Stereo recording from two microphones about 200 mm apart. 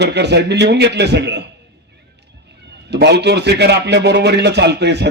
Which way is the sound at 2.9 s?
55° right (ahead or behind).